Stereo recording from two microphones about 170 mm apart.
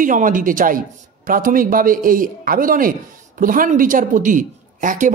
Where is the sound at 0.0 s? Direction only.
50° right (ahead or behind).